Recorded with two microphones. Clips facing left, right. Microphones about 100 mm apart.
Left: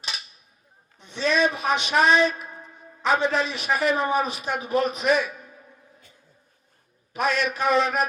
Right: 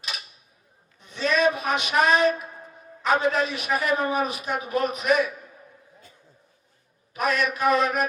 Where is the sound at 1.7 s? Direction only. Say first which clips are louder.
Left 4 dB; 30° left (ahead or behind).